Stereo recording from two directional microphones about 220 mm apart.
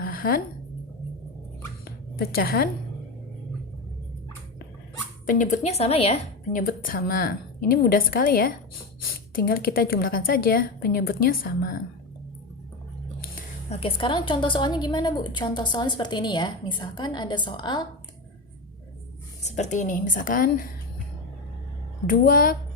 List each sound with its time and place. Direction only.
0.0 s a sound: 40° left (ahead or behind)
2.1 s a woman's voice: 45° left (ahead or behind)
5.2 s a woman's voice: 35° left (ahead or behind)
6.6 s a woman's voice: 40° left (ahead or behind)
13.3 s a woman's voice: 25° left (ahead or behind)
19.4 s a woman's voice: 30° left (ahead or behind)
22.0 s a woman's voice: 40° left (ahead or behind)